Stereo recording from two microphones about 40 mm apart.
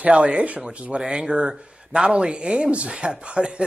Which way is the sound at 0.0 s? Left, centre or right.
Right.